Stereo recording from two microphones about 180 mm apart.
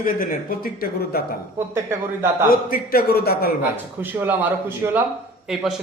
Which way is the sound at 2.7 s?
55° left (ahead or behind).